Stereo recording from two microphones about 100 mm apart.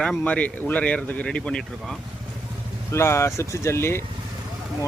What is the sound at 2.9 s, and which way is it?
Speech, 25° left (ahead or behind).